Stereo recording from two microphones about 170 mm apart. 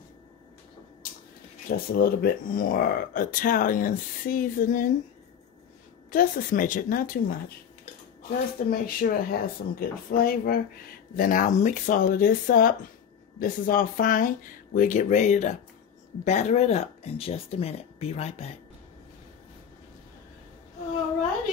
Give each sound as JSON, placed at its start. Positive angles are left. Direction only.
{"t": 1.7, "sound": "speech", "side_deg": 60}
{"t": 6.0, "sound": "speech", "side_deg": 55}
{"t": 8.6, "sound": "speech", "side_deg": 60}